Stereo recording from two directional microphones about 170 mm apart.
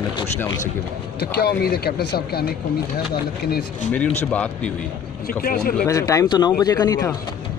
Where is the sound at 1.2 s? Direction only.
65° left (ahead or behind).